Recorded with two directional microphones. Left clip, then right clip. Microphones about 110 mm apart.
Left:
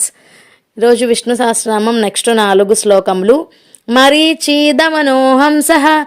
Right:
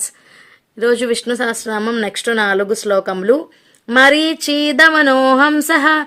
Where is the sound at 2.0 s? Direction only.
45° left (ahead or behind).